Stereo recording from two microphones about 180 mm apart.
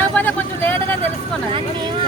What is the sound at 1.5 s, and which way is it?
Speech, 25° right (ahead or behind).